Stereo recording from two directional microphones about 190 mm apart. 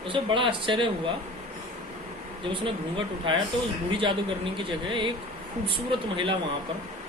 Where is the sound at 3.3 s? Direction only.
25° right (ahead or behind).